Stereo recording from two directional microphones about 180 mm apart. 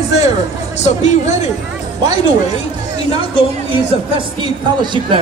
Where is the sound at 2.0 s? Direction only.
35° left (ahead or behind).